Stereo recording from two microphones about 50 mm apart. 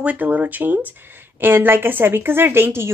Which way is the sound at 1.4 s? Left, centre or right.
Right.